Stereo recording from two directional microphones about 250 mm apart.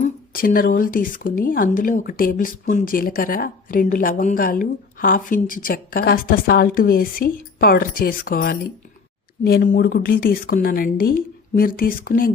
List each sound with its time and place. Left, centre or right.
0.0 s speech: left